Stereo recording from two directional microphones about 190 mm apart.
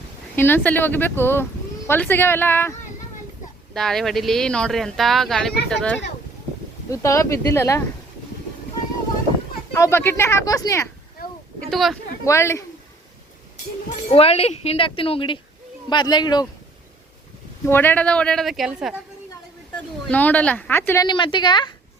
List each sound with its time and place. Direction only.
0.3 s a woman's voice: 10° left (ahead or behind)
3.8 s speech: centre (ahead or behind)
6.9 s a woman's voice: 15° left (ahead or behind)
9.7 s a woman's voice: 15° left (ahead or behind)
11.2 s a sound: 50° left (ahead or behind)
11.6 s speech: centre (ahead or behind)
12.2 s a woman's voice: 15° left (ahead or behind)
14.1 s speech: 30° left (ahead or behind)
17.7 s a woman's voice: 10° left (ahead or behind)